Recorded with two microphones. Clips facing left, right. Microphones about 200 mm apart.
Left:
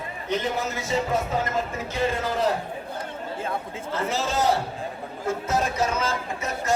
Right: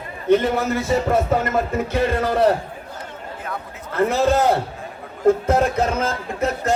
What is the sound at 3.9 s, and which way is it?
Speech, 55° right (ahead or behind).